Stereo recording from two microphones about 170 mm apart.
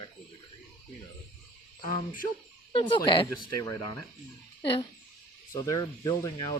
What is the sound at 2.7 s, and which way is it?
Speech, 30° left (ahead or behind).